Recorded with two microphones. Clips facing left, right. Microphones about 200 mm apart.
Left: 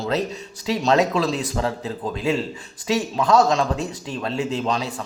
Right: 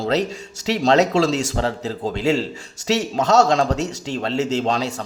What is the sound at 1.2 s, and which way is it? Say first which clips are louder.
Speech: right 4 dB; 90° right.